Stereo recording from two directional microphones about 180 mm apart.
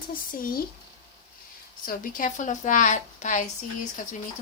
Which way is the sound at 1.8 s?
50° left (ahead or behind).